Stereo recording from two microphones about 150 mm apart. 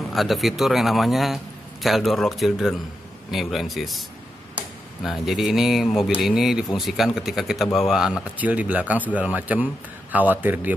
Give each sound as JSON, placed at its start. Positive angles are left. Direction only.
{"t": 0.1, "sound": "a man's voice", "side_deg": 0}